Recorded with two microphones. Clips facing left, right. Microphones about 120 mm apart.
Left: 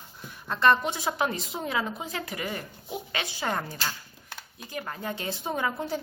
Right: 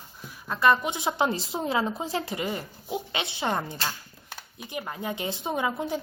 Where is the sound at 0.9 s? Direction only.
25° right (ahead or behind).